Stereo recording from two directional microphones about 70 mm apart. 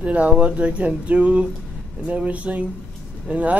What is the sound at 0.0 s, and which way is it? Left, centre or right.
Speech, centre.